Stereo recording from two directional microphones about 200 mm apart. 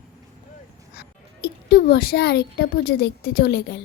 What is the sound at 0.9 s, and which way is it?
Speech, 55° left (ahead or behind).